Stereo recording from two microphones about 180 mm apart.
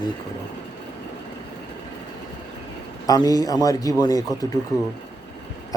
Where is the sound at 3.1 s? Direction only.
20° left (ahead or behind).